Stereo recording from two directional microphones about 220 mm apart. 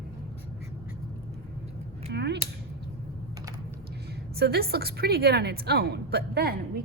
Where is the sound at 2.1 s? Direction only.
50° right (ahead or behind).